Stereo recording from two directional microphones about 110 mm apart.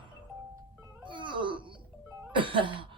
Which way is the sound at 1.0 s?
45° right (ahead or behind).